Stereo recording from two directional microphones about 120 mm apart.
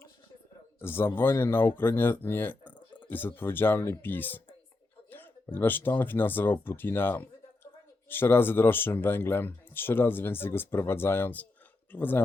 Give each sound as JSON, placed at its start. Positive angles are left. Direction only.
{"t": 0.8, "sound": "speech", "side_deg": 20}